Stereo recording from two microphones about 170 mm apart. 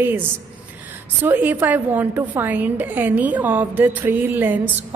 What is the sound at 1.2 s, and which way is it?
A woman's voice, 10° right (ahead or behind).